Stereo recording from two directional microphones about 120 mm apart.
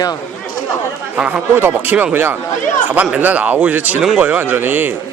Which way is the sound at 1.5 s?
20° right (ahead or behind).